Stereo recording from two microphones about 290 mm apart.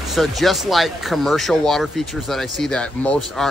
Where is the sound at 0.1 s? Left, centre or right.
Centre.